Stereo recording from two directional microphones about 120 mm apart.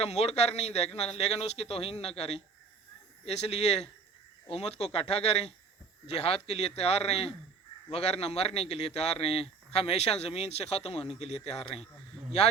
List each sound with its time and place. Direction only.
0.0 s a man's voice: 60° left (ahead or behind)